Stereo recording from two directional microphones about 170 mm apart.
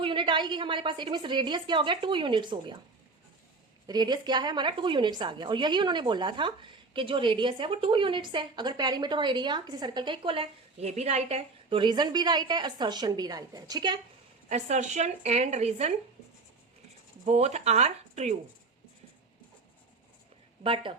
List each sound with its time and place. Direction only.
0.0 s a woman's voice: 30° right (ahead or behind)
3.8 s a woman's voice: 25° right (ahead or behind)
14.5 s speech: 45° right (ahead or behind)
17.2 s speech: 40° right (ahead or behind)
20.7 s speech: 30° right (ahead or behind)